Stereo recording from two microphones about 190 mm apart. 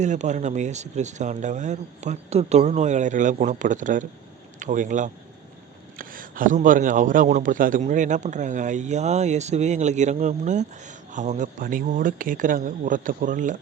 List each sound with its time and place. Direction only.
0.0 s a man's voice: 40° right (ahead or behind)